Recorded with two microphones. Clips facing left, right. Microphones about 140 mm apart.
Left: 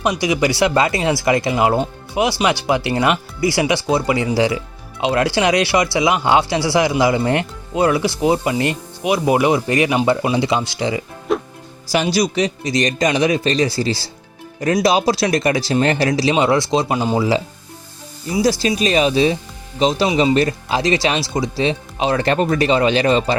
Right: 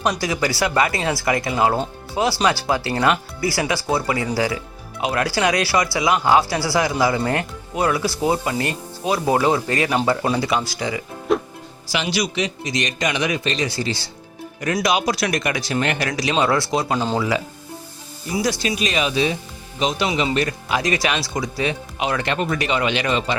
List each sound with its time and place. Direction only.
0.0 s speech: 15° left (ahead or behind)
11.3 s music: centre (ahead or behind)
11.9 s speech: 40° left (ahead or behind); by 17.2 s 15° left (ahead or behind)
18.3 s speech: 30° left (ahead or behind)